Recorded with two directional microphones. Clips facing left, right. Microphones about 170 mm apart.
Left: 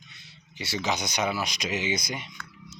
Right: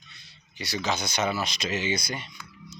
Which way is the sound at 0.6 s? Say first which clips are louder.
Even; 20° left (ahead or behind).